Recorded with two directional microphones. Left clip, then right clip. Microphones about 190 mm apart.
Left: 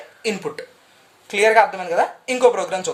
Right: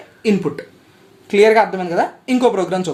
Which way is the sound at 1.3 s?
Centre (ahead or behind).